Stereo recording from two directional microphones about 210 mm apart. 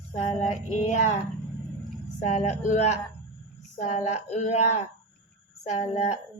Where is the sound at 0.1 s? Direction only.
30° left (ahead or behind).